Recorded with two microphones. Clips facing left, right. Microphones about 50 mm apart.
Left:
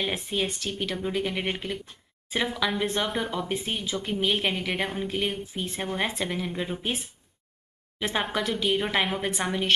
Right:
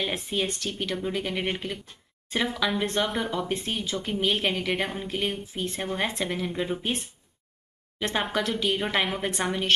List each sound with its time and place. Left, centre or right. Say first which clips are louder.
0.0 s speech: even; centre